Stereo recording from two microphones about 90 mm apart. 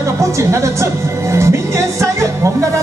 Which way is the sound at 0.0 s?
35° right (ahead or behind).